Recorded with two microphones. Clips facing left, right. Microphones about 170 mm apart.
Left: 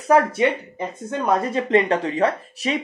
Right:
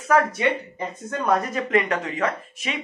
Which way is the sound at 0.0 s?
25° left (ahead or behind).